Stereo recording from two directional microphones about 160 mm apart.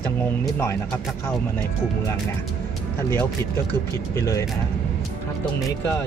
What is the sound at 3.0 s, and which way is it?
Speech, 15° left (ahead or behind).